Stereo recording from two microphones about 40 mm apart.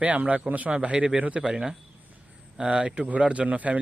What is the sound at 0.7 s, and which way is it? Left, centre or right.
Speech, right.